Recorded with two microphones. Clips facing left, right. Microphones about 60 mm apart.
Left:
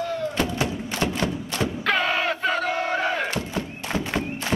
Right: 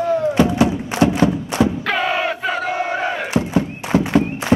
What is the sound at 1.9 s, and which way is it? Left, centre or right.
Battle cry, centre.